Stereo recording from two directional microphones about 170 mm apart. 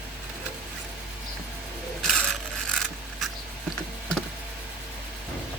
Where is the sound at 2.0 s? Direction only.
5° left (ahead or behind).